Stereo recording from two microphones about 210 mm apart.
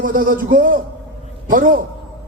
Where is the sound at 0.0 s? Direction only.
40° right (ahead or behind).